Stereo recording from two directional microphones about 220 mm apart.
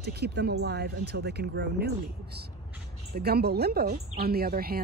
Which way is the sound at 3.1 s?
45° right (ahead or behind).